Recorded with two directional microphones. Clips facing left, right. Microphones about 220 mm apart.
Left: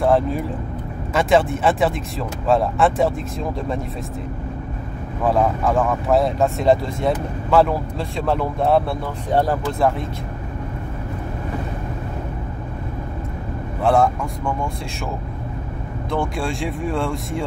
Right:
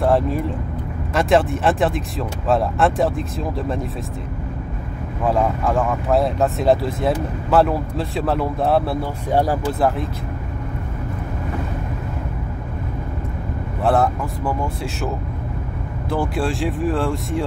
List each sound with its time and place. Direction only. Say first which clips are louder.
0.0 s speech: even; centre (ahead or behind)
5.2 s speech: left 1 dB; centre (ahead or behind)
13.8 s speech: left 1 dB; centre (ahead or behind)
16.1 s speech: right 2 dB; 5° right (ahead or behind)